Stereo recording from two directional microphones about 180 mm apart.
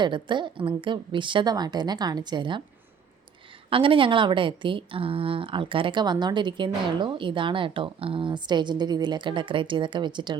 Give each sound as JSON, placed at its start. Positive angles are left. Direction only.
{"t": 0.0, "sound": "a woman's voice", "side_deg": -25}
{"t": 3.7, "sound": "a woman's voice", "side_deg": -30}